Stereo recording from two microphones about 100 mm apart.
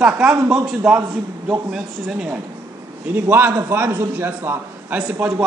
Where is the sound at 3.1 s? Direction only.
20° right (ahead or behind).